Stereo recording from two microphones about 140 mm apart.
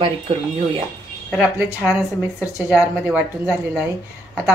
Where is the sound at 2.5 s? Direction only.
5° right (ahead or behind).